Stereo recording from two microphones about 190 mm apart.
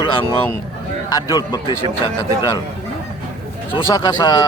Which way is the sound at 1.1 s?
20° left (ahead or behind).